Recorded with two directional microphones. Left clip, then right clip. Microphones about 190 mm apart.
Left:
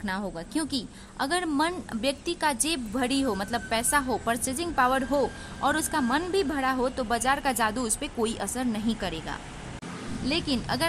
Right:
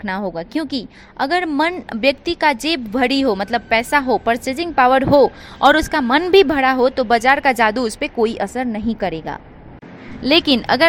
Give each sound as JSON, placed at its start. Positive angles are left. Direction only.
{"t": 0.0, "sound": "a woman's voice", "side_deg": -20}
{"t": 10.2, "sound": "speech", "side_deg": -30}